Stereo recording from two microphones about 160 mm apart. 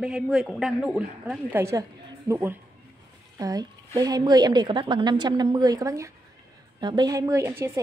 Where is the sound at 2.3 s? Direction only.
15° right (ahead or behind).